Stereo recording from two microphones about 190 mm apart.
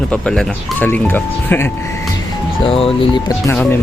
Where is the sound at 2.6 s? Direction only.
30° left (ahead or behind).